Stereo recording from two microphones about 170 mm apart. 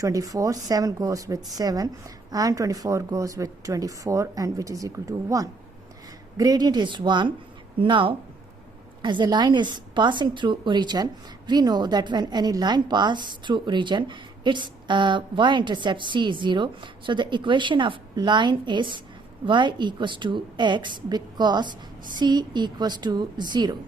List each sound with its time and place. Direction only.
0.0 s a woman's voice: 20° right (ahead or behind)